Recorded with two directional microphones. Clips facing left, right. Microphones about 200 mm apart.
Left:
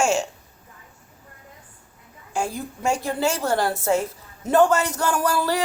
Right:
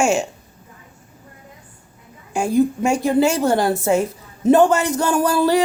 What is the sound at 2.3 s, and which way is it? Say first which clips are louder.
A woman's voice: right 11 dB; 15° right (ahead or behind).